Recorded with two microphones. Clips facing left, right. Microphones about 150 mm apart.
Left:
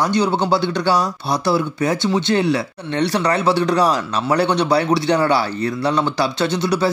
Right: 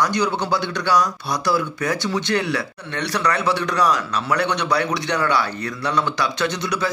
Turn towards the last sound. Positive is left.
turn(degrees=30)  # may be behind; listen again after turning